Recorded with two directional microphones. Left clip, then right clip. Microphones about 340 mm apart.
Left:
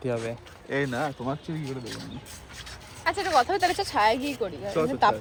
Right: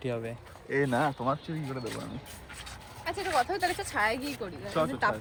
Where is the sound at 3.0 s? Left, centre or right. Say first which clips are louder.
Left 6 dB; left.